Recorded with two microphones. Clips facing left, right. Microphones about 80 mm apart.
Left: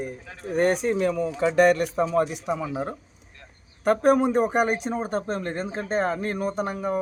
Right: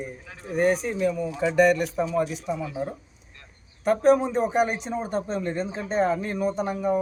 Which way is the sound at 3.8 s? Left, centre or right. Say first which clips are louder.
Even; left.